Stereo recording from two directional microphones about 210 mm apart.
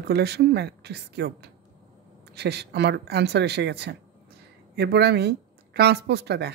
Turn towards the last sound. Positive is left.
turn(degrees=-50)  # may be behind; listen again after turning